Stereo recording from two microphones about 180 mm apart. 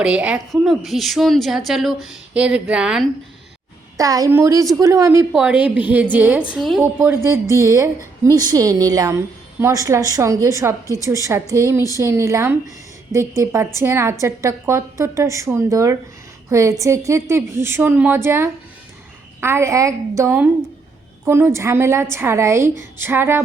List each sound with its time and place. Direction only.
0.0 s a woman's voice: 5° right (ahead or behind)
3.9 s a woman's voice: 20° right (ahead or behind)
5.3 s a woman's voice: 5° right (ahead or behind)